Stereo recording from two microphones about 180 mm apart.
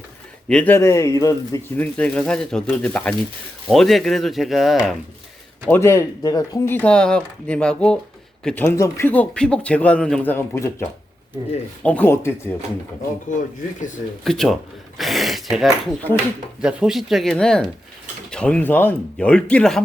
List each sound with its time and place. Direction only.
0.4 s speech: 5° left (ahead or behind)
1.8 s speech: 5° left (ahead or behind)
5.6 s speech: 15° left (ahead or behind)
6.7 s speech: 5° left (ahead or behind)
13.7 s speech: 45° left (ahead or behind)
14.3 s speech: centre (ahead or behind)